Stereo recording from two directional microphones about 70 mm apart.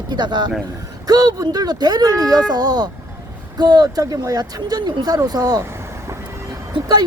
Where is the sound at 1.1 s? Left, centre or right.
Right.